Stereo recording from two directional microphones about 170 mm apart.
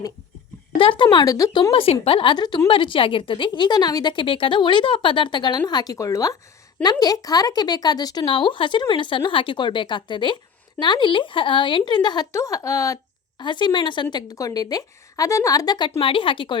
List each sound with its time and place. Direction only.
0.8 s a woman's voice: 30° left (ahead or behind)
1.7 s a woman's voice: 35° left (ahead or behind)